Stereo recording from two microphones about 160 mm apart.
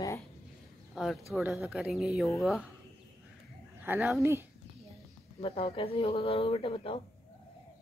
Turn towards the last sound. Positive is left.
turn(degrees=35)  # may be behind; listen again after turning